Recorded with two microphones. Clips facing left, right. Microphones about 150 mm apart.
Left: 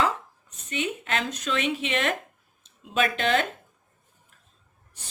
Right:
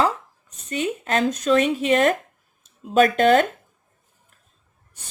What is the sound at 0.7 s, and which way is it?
Speech, 40° right (ahead or behind).